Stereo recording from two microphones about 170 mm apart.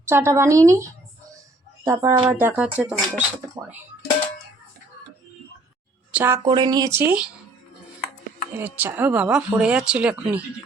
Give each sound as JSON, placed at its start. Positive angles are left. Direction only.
{"t": 0.1, "sound": "speech", "side_deg": -15}
{"t": 6.1, "sound": "speech", "side_deg": -10}
{"t": 7.0, "sound": "speech", "side_deg": -10}
{"t": 8.5, "sound": "speech", "side_deg": -10}